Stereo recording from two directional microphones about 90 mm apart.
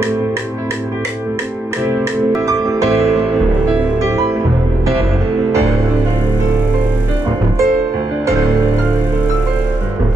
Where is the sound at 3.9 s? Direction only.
35° right (ahead or behind).